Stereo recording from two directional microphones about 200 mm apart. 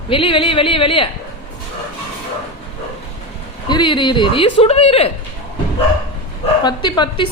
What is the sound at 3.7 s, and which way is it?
A woman's voice, 25° left (ahead or behind).